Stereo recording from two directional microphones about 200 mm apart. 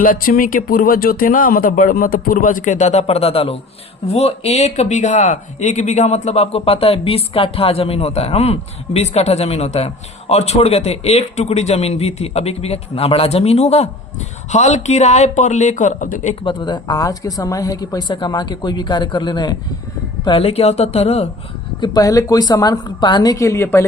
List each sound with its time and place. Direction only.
0.0 s speech: 45° left (ahead or behind)
16.4 s speech: 25° left (ahead or behind)
21.8 s speech: 20° left (ahead or behind)